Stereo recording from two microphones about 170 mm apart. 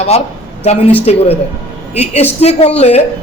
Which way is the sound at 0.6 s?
40° left (ahead or behind).